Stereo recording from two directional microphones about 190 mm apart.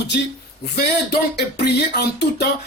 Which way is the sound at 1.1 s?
60° left (ahead or behind).